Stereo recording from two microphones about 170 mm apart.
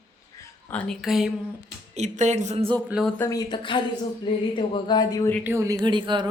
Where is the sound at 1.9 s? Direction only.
45° right (ahead or behind).